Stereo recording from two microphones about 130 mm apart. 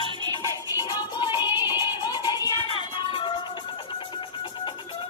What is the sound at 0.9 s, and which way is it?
Music, 35° left (ahead or behind).